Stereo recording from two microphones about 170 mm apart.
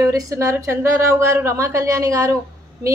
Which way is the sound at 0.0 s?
20° right (ahead or behind).